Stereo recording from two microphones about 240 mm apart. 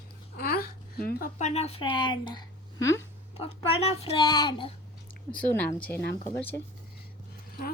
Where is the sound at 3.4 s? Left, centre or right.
Left; by 5.9 s centre.